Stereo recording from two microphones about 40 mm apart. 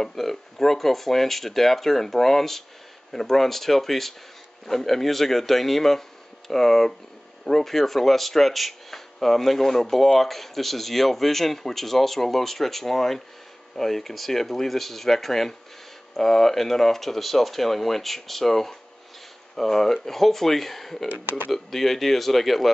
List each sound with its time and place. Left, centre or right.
0.0 s speech: centre
21.1 s speech: right
21.5 s speech: centre